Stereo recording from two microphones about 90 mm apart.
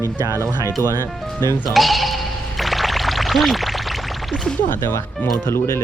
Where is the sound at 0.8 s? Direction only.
30° left (ahead or behind).